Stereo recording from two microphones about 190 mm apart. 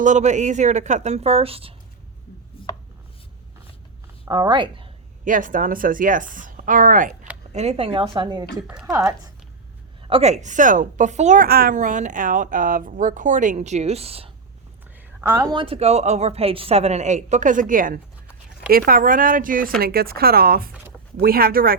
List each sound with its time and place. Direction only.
0.0 s a woman's voice: 40° right (ahead or behind)
4.3 s a woman's voice: 20° right (ahead or behind)
5.2 s a woman's voice: 45° right (ahead or behind)
7.5 s a woman's voice: 35° right (ahead or behind)
8.6 s speech: 5° right (ahead or behind)
8.9 s a woman's voice: 20° right (ahead or behind)
10.0 s a woman's voice: 30° right (ahead or behind)
15.5 s a woman's voice: 30° right (ahead or behind); by 21.8 s 50° right (ahead or behind)